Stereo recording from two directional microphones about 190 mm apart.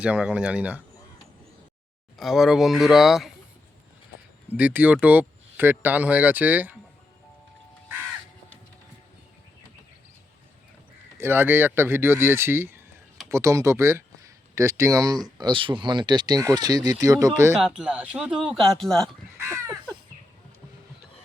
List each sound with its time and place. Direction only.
0.0 s speech: 5° right (ahead or behind)
2.1 s speech: centre (ahead or behind)
4.5 s speech: 10° right (ahead or behind)
11.2 s speech: 10° right (ahead or behind)
17.6 s speech: 5° right (ahead or behind)